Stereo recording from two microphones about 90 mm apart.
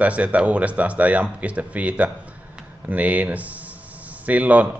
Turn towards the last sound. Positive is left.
turn(degrees=-15)  # may be behind; listen again after turning